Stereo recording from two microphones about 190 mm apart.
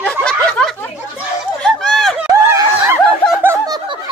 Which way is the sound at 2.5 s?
15° right (ahead or behind).